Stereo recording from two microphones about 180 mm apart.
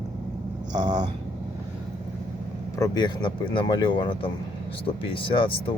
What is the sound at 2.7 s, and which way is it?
Speech, 20° left (ahead or behind).